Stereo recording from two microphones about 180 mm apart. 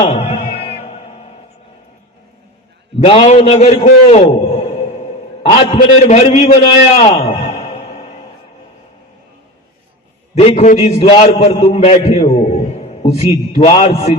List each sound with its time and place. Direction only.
0.0 s music: 35° left (ahead or behind)
3.0 s a man's voice: 35° left (ahead or behind)
6.9 s a sound: 35° left (ahead or behind)
10.3 s a man's voice: 35° left (ahead or behind)